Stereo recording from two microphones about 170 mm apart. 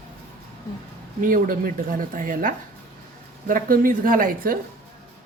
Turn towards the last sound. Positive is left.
turn(degrees=-55)  # may be behind; listen again after turning